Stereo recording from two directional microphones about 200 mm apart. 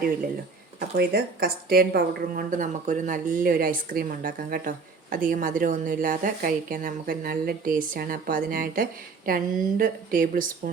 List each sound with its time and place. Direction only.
0.8 s a woman's voice: 50° right (ahead or behind)